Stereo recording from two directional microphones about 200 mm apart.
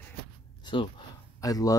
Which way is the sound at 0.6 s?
25° left (ahead or behind).